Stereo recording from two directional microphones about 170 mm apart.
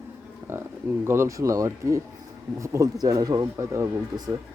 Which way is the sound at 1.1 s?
15° right (ahead or behind).